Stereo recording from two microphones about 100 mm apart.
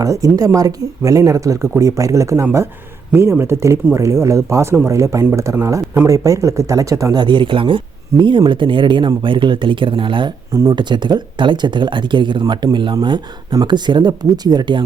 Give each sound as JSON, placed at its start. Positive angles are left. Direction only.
{"t": 0.0, "sound": "speech", "side_deg": -35}
{"t": 7.2, "sound": "speech", "side_deg": -50}
{"t": 10.5, "sound": "speech", "side_deg": -35}
{"t": 10.8, "sound": "speech", "side_deg": -50}